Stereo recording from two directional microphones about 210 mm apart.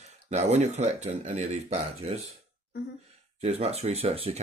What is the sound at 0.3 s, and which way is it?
Speech, 35° right (ahead or behind).